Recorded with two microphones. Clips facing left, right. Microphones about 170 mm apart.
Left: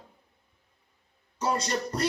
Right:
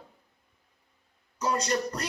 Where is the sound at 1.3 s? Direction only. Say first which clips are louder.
Right 1 dB; 30° left (ahead or behind).